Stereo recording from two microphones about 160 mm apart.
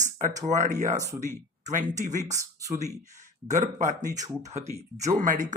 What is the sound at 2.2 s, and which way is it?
Speech, 20° right (ahead or behind).